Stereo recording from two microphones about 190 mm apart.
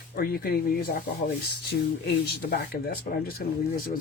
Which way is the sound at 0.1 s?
50° left (ahead or behind).